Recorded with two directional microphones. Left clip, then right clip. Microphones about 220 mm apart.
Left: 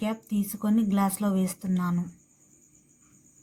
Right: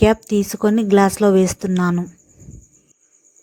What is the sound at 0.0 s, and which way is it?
Speech, 35° right (ahead or behind).